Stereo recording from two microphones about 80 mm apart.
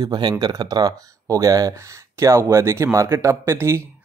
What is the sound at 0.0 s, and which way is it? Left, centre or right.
Speech, right.